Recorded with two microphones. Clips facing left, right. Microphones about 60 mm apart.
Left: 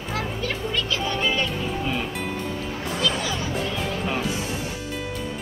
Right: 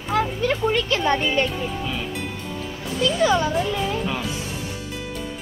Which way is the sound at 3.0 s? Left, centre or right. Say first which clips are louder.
Right 8 dB; right.